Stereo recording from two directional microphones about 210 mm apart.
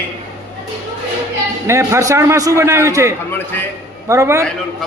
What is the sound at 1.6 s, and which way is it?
A man's voice, 15° right (ahead or behind).